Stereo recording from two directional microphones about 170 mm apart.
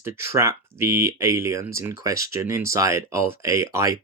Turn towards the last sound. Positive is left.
turn(degrees=-15)  # may be behind; listen again after turning